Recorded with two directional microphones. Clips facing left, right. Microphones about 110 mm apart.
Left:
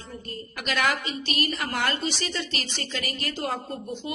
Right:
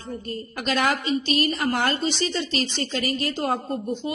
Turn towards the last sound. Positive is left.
turn(degrees=-30)  # may be behind; listen again after turning